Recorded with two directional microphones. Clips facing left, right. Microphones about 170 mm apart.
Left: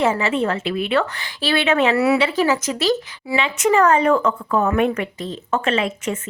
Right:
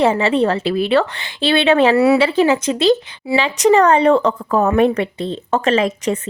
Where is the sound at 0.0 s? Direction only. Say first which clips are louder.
Right 4 dB; 30° right (ahead or behind).